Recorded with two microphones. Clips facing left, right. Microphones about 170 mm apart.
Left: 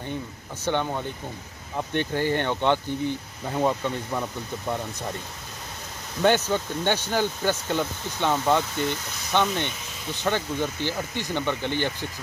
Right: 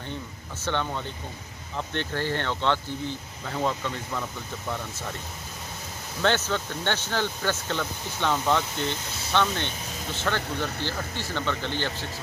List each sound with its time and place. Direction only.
0.7 s speech: 15° left (ahead or behind)
6.2 s speech: 15° left (ahead or behind)